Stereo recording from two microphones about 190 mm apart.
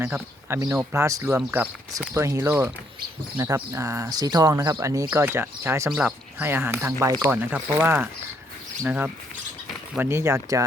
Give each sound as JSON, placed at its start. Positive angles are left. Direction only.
{"t": 0.0, "sound": "speech", "side_deg": -10}